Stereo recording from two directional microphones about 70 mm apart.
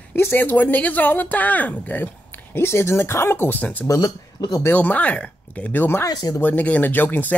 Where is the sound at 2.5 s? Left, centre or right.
Left.